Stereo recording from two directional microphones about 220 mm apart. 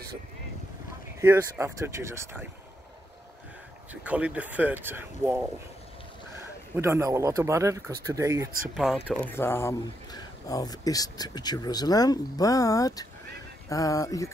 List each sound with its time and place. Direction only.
1.2 s speech: 10° right (ahead or behind)
3.9 s speech: 5° right (ahead or behind)
6.8 s speech: 10° right (ahead or behind)
8.7 s speech: centre (ahead or behind); by 14.3 s 15° left (ahead or behind)